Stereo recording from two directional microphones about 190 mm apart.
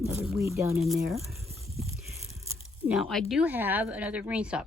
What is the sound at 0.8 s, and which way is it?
Speech, centre (ahead or behind).